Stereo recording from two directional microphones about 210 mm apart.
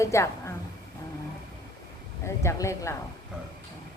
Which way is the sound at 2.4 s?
15° left (ahead or behind).